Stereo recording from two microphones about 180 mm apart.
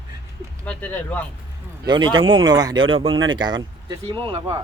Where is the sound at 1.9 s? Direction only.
25° right (ahead or behind).